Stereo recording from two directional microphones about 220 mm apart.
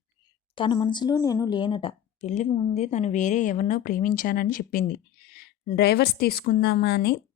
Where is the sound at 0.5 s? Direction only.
20° left (ahead or behind).